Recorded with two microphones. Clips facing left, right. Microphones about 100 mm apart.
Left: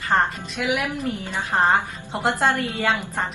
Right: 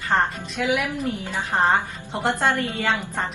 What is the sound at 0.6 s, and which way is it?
A woman's voice, 15° left (ahead or behind).